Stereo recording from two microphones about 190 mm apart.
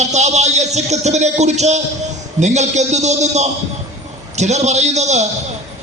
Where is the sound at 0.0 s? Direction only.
35° right (ahead or behind).